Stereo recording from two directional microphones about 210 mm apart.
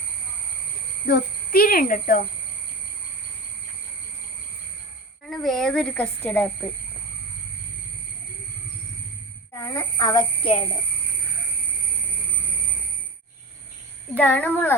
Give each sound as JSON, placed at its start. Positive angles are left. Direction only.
{"t": 1.0, "sound": "speech", "side_deg": 50}
{"t": 5.3, "sound": "a woman's voice", "side_deg": 0}
{"t": 9.6, "sound": "speech", "side_deg": 15}
{"t": 14.2, "sound": "speech", "side_deg": 10}